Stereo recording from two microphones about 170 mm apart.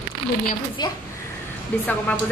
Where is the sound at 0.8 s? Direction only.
25° left (ahead or behind).